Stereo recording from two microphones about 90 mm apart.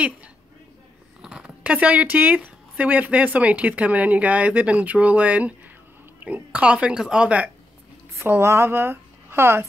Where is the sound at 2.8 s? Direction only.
15° right (ahead or behind).